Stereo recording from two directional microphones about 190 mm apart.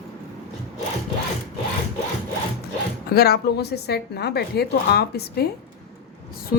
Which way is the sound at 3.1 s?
55° left (ahead or behind).